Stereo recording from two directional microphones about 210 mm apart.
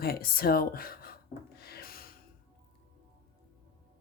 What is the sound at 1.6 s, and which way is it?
Rub, 50° left (ahead or behind).